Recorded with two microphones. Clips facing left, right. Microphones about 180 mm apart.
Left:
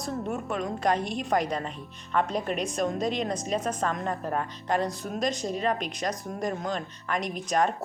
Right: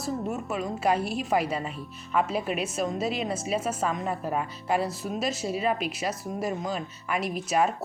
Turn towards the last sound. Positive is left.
turn(degrees=-5)  # may be behind; listen again after turning